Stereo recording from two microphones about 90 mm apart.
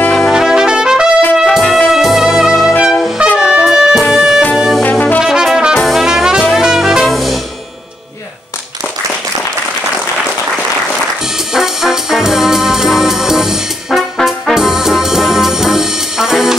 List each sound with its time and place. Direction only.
0.1 s trumpet: 5° left (ahead or behind)
0.4 s trumpet: 5° right (ahead or behind)
1.3 s music: 5° right (ahead or behind)
3.3 s brass instrument: 10° right (ahead or behind)
4.1 s music: 5° right (ahead or behind)
4.6 s brass instrument: centre (ahead or behind)
4.8 s brass instrument: 15° left (ahead or behind)
5.2 s brass instrument: 5° right (ahead or behind)
6.5 s music: 5° right (ahead or behind)
11.5 s brass instrument: 5° right (ahead or behind)